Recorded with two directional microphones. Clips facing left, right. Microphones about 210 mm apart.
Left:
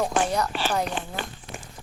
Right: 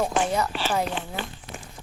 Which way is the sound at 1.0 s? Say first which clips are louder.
Left 1 dB; 50° left (ahead or behind).